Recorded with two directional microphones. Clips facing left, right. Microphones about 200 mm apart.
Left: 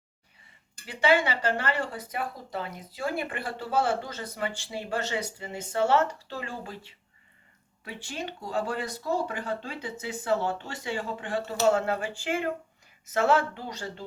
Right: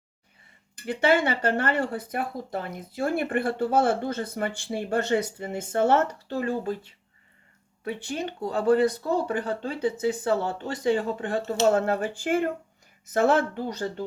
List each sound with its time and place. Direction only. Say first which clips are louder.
0.9 s speech: right 2 dB; 55° right (ahead or behind)
7.9 s speech: right 6 dB; 55° right (ahead or behind)